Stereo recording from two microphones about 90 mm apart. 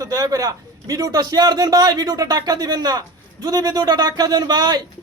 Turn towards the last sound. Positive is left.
turn(degrees=-50)  # may be behind; listen again after turning